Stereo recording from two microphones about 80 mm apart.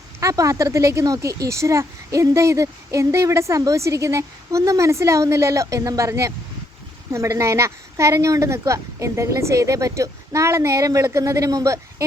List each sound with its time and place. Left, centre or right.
0.2 s speech: right